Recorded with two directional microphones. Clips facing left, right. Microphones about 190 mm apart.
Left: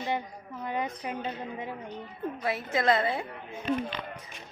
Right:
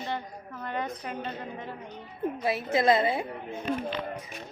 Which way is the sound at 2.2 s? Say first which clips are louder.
Right 3 dB; 20° right (ahead or behind).